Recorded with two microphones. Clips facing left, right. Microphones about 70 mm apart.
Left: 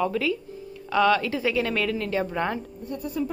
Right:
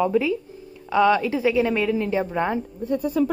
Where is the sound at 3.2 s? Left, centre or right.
Right.